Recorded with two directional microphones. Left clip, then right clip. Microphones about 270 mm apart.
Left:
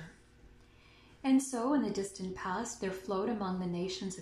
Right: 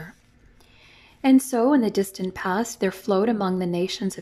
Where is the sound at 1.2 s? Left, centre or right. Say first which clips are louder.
Right 12 dB; right.